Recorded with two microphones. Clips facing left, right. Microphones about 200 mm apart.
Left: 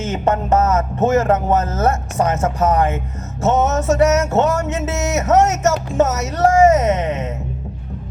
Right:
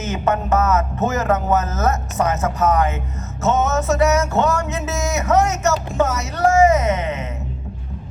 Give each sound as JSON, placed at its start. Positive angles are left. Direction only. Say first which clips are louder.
{"t": 0.0, "sound": "a man's voice", "louder": "left 2 dB", "side_deg": 30}